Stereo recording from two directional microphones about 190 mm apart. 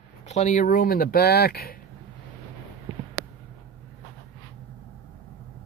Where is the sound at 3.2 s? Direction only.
10° right (ahead or behind).